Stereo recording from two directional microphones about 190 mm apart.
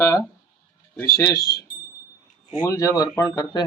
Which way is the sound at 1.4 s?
55° left (ahead or behind).